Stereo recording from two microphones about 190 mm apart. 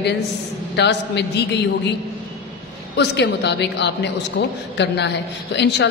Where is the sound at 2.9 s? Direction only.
65° left (ahead or behind).